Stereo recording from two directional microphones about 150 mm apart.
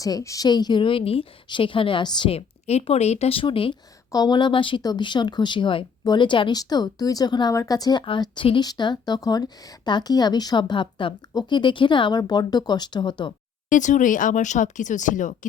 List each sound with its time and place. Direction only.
0.0 s a woman's voice: 20° left (ahead or behind)
13.7 s speech: 55° left (ahead or behind)